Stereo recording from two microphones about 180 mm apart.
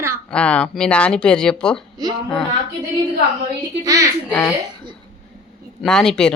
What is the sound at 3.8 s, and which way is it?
Speech, 20° right (ahead or behind).